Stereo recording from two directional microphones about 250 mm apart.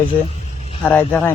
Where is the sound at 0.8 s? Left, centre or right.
Centre.